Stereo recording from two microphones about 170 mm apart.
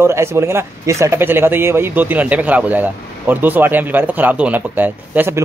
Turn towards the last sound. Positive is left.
turn(degrees=-10)  # may be behind; listen again after turning